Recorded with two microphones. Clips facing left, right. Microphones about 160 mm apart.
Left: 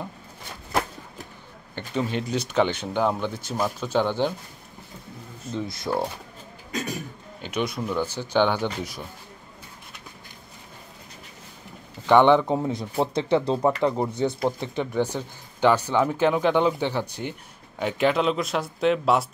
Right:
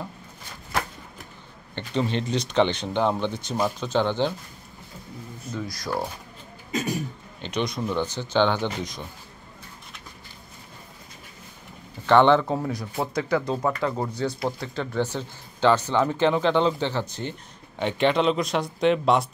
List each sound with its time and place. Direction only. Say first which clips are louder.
1.8 s speech: right 1 dB; 10° left (ahead or behind)
5.5 s speech: left 3 dB; 25° left (ahead or behind)
7.4 s speech: even; 10° left (ahead or behind)
12.1 s speech: left 1 dB; 15° left (ahead or behind)